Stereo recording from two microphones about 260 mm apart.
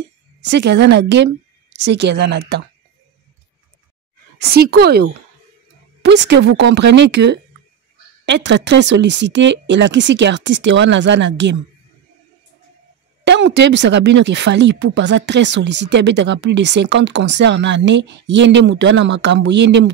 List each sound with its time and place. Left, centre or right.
0.4 s a woman's voice: right
4.4 s a woman's voice: right
13.2 s speech: right